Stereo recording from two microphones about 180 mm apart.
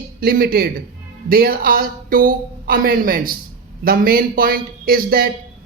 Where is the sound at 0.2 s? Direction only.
55° right (ahead or behind).